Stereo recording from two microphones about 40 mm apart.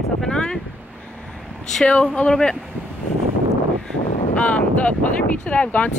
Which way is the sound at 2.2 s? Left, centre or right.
Left.